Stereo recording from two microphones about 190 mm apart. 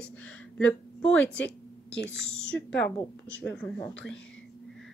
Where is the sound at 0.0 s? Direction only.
10° left (ahead or behind).